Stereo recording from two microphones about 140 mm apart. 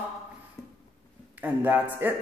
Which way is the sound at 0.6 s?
20° left (ahead or behind).